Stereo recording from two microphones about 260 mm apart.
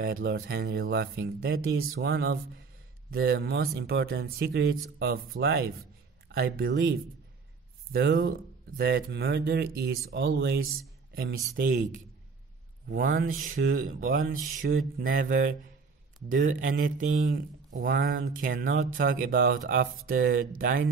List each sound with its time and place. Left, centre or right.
0.0 s speech: right